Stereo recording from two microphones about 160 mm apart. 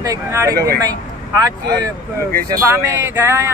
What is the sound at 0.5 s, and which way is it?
Speech, 80° right.